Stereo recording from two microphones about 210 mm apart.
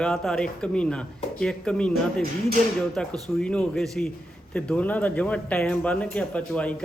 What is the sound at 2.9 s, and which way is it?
Speech, centre (ahead or behind).